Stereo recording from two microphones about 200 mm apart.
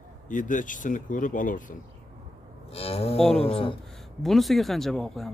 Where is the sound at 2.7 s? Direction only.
30° left (ahead or behind).